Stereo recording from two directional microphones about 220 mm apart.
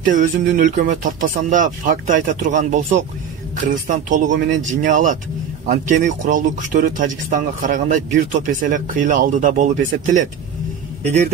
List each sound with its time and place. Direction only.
0.1 s speech: 35° right (ahead or behind)